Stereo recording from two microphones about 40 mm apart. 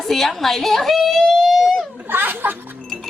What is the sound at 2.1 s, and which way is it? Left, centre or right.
Speech, right.